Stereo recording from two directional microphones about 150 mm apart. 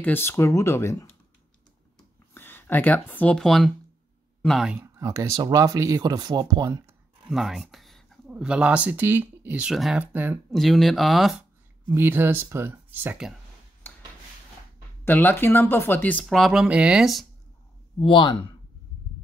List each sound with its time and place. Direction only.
0.0 s speech: 15° left (ahead or behind)
2.3 s speech: 15° left (ahead or behind)
4.7 s speech: 20° right (ahead or behind)
6.9 s speech: 5° right (ahead or behind)
10.5 s speech: centre (ahead or behind)
11.9 s speech: 15° right (ahead or behind)
13.9 s rub: 10° left (ahead or behind)
15.0 s speech: 10° left (ahead or behind)
18.0 s speech: 35° left (ahead or behind)